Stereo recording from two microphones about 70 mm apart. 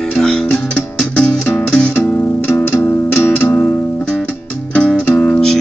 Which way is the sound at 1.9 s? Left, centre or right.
Left.